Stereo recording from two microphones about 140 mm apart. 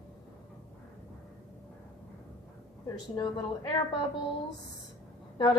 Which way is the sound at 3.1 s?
35° left (ahead or behind).